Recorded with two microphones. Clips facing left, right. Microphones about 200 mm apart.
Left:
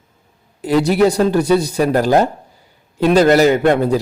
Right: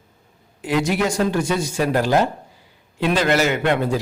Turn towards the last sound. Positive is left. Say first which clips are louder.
# left 6 dB
turn(degrees=45)  # may be behind; listen again after turning